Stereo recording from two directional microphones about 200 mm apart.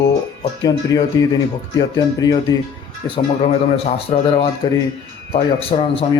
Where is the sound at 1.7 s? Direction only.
20° left (ahead or behind).